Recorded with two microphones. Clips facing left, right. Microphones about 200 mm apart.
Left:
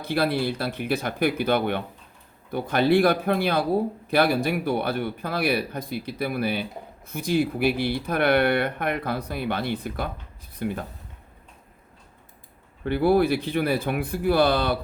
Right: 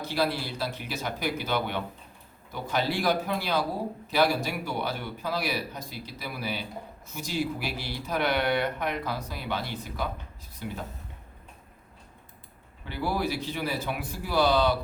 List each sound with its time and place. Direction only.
0.0 s speech: 55° left (ahead or behind)
12.8 s speech: 55° left (ahead or behind)